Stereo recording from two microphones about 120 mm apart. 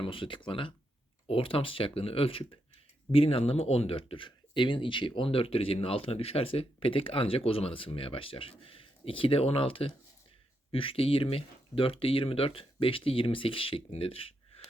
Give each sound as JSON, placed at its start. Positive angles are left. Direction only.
{"t": 0.0, "sound": "speech", "side_deg": 45}